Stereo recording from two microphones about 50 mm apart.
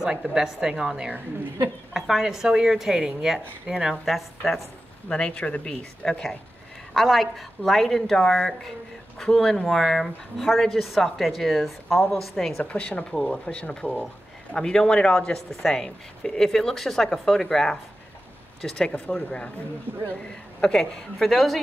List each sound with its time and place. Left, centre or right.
0.0 s speech: centre
5.1 s speech: left
6.9 s a woman's voice: centre
12.6 s speech: left
13.1 s speech: centre
13.5 s speech: left
20.6 s speech: centre